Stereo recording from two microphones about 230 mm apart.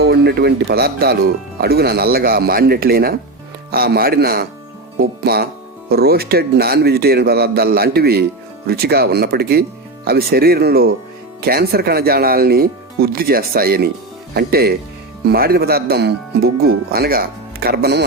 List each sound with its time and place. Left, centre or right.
0.0 s speech: right